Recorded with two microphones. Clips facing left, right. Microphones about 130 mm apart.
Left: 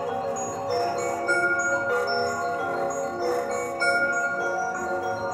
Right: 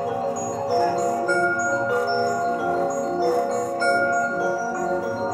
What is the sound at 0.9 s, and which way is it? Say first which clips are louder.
Music: right 5 dB; 20° right (ahead or behind).